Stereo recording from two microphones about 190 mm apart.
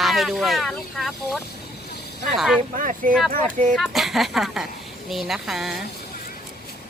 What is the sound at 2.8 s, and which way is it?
Speech, 45° right (ahead or behind).